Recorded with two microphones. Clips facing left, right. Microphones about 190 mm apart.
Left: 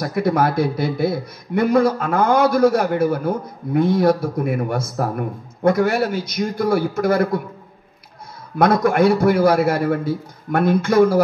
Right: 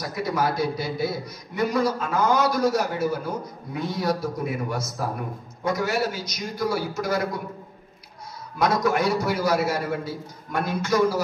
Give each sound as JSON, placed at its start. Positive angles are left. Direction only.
{"t": 0.0, "sound": "a man's voice", "side_deg": 55}
{"t": 8.5, "sound": "a man's voice", "side_deg": 55}